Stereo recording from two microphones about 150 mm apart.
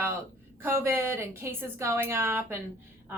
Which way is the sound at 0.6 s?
15° right (ahead or behind).